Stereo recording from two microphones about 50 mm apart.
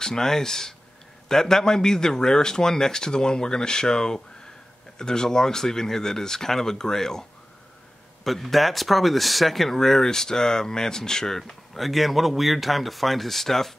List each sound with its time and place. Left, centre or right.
0.0 s a man's voice: centre